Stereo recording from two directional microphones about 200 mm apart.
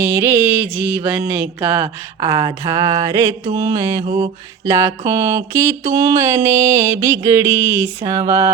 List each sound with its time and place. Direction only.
0.0 s mantra: 10° right (ahead or behind)